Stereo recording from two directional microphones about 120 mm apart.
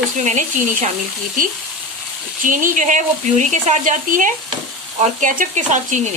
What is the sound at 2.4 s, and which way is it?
Speech, 90° right.